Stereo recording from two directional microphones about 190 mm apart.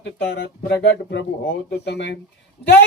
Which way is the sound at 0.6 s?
60° left (ahead or behind).